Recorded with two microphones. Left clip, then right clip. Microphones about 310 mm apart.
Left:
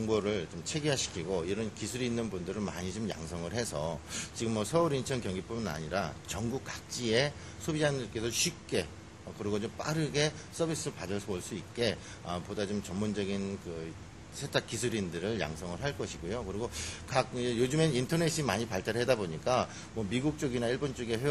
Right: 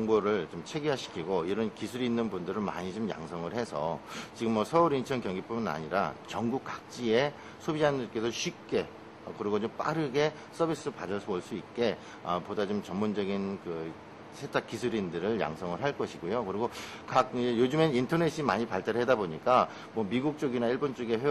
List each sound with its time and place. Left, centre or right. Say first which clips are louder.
0.1 s speech: right 4 dB; left
14.5 s speech: right 1 dB; left